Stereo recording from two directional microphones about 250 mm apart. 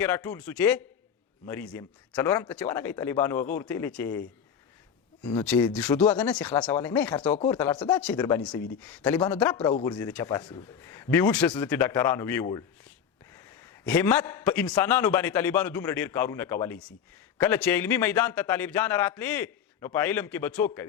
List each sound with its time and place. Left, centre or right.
0.0 s a man's voice: centre
5.4 s a man's voice: centre
6.3 s a man's voice: centre
13.8 s a man's voice: centre